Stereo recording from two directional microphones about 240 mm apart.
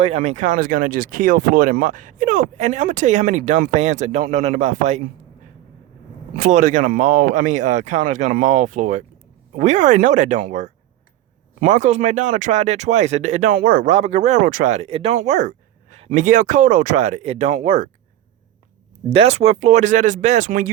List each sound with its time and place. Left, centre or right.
0.0 s speech: right
6.3 s speech: right
19.1 s speech: right